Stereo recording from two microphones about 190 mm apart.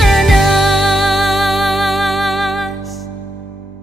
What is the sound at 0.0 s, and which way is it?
Music, centre (ahead or behind).